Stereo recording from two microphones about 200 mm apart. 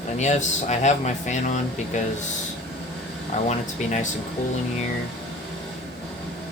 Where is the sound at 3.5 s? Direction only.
35° left (ahead or behind).